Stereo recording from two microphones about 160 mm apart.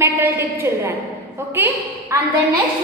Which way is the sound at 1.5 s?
15° right (ahead or behind).